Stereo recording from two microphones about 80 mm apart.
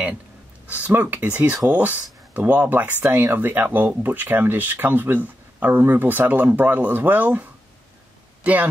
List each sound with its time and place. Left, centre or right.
0.7 s speech: centre